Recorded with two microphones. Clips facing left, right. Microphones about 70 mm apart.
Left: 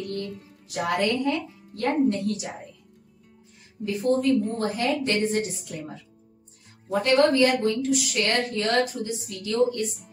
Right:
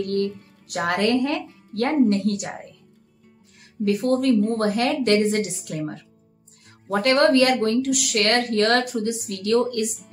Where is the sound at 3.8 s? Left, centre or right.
Right.